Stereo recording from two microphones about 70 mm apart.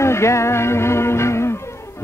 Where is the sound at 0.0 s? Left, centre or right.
Left.